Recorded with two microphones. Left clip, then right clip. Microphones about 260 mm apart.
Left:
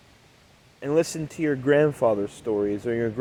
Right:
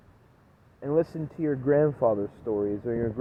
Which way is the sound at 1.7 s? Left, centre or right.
Left.